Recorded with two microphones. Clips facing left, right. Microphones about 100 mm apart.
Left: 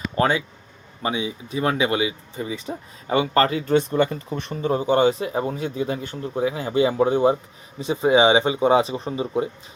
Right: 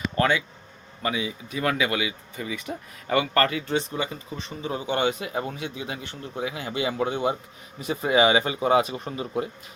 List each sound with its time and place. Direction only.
0.2 s speech: 30° left (ahead or behind)
3.7 s speech: 50° left (ahead or behind); by 7.3 s 35° left (ahead or behind)
7.8 s speech: 25° left (ahead or behind)